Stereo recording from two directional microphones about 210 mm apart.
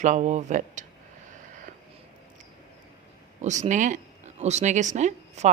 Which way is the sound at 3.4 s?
35° right (ahead or behind).